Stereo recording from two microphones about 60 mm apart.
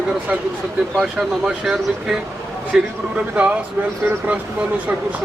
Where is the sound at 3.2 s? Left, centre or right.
Right.